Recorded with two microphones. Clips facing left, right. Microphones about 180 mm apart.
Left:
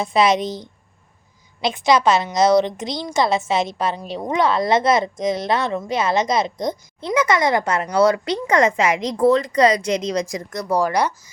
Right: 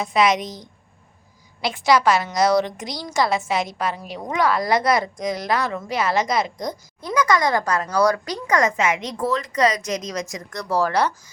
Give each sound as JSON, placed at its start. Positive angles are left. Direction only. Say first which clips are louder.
{"t": 0.0, "sound": "a woman's voice", "louder": "left 2 dB", "side_deg": 30}
{"t": 10.5, "sound": "speech", "louder": "left 1 dB", "side_deg": 20}